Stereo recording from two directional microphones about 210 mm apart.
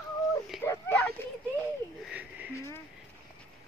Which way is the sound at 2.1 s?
5° right (ahead or behind).